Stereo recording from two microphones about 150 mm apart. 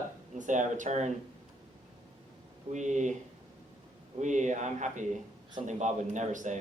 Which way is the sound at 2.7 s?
55° right (ahead or behind).